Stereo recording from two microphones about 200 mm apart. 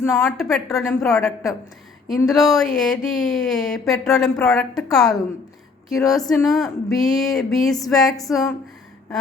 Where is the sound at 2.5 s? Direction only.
Centre (ahead or behind).